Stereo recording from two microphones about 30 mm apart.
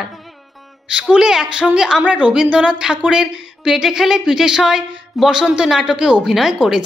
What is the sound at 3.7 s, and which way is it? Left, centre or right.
Speech, centre.